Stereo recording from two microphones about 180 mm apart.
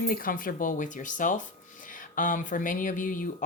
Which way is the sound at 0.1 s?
50° left (ahead or behind).